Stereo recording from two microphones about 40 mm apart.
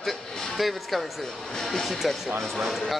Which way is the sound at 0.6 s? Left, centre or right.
Centre.